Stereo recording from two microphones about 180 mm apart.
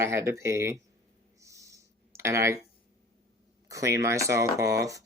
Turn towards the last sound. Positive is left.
turn(degrees=-20)  # may be behind; listen again after turning